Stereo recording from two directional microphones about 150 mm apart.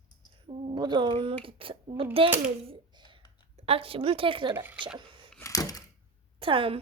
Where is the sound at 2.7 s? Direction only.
30° right (ahead or behind).